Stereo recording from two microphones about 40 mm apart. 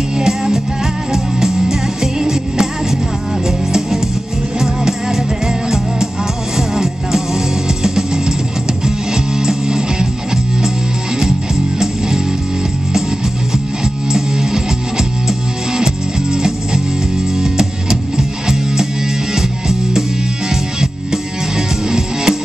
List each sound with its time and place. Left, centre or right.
0.2 s music: centre
14.1 s music: centre